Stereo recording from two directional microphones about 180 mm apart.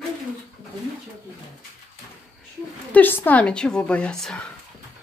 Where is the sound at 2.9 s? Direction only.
10° left (ahead or behind).